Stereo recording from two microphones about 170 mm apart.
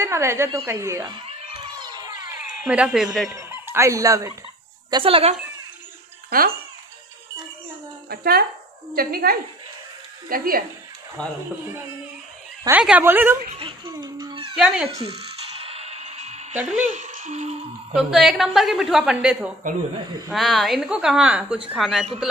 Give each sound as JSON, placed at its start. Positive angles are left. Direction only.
{"t": 0.0, "sound": "speech", "side_deg": -15}
{"t": 1.6, "sound": "a sound", "side_deg": -25}
{"t": 2.4, "sound": "speech", "side_deg": -5}
{"t": 3.3, "sound": "speech", "side_deg": -15}
{"t": 4.9, "sound": "speech", "side_deg": -30}
{"t": 8.1, "sound": "speech", "side_deg": -65}
{"t": 11.2, "sound": "a woman's voice", "side_deg": 5}
{"t": 12.6, "sound": "speech", "side_deg": -10}
{"t": 13.6, "sound": "a sound", "side_deg": -30}
{"t": 14.5, "sound": "speech", "side_deg": -5}
{"t": 15.0, "sound": "music", "side_deg": -35}
{"t": 16.6, "sound": "speech", "side_deg": -45}
{"t": 17.9, "sound": "a woman's voice", "side_deg": 0}